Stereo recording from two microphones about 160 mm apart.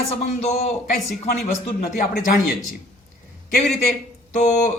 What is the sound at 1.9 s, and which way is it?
Speech, 60° left (ahead or behind).